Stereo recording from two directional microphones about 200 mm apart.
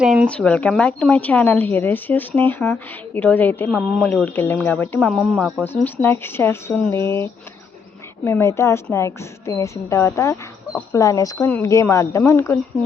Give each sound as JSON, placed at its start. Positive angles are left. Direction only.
{"t": 0.0, "sound": "speech", "side_deg": -5}
{"t": 5.6, "sound": "speech", "side_deg": 10}